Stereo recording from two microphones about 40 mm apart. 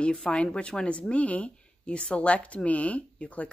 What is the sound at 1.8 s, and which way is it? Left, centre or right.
A woman's voice, left.